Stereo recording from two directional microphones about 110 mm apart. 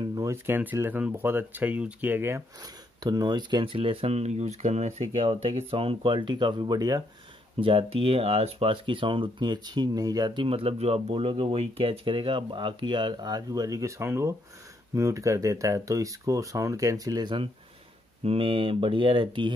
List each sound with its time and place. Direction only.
0.1 s a sound: 30° right (ahead or behind)
0.6 s speech: 15° right (ahead or behind)
2.6 s speech: 35° right (ahead or behind); by 5.3 s 80° right
5.3 s speech: 55° right (ahead or behind); by 7.0 s 40° right (ahead or behind)
7.6 s speech: 60° right (ahead or behind)
18.2 s speech: 60° right (ahead or behind)